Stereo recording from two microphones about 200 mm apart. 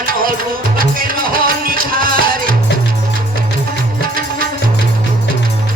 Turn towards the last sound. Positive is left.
turn(degrees=-45)  # may be behind; listen again after turning